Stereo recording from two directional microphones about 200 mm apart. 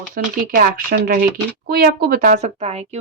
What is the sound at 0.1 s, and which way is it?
Speech, 45° right (ahead or behind).